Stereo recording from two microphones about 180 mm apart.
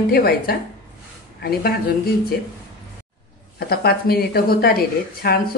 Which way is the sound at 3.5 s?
60° left (ahead or behind).